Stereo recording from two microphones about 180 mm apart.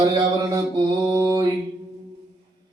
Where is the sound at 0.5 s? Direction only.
20° right (ahead or behind).